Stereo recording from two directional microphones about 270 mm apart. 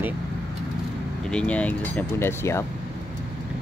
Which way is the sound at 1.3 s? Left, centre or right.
Centre.